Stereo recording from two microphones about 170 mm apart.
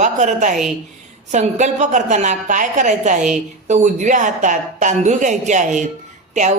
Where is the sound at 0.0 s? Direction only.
45° right (ahead or behind).